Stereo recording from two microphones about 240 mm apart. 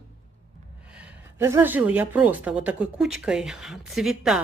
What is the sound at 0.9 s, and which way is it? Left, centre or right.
A woman's voice, centre.